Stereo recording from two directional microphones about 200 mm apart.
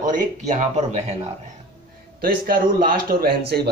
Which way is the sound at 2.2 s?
45° right (ahead or behind).